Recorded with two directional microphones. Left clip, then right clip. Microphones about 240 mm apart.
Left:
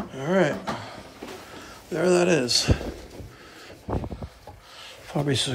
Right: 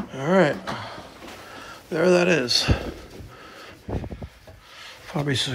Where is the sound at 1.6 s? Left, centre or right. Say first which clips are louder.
Right 3 dB; centre.